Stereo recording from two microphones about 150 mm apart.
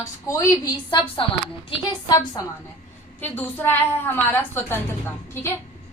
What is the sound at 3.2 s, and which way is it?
A woman's voice, 10° left (ahead or behind).